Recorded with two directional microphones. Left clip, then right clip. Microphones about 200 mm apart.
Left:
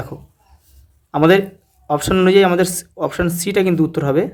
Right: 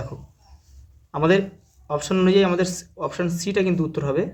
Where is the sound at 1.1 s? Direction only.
35° left (ahead or behind).